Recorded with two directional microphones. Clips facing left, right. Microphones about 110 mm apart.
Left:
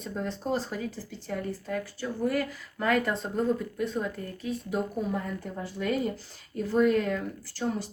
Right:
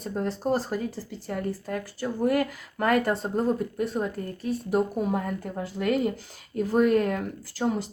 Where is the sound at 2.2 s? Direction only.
60° right (ahead or behind).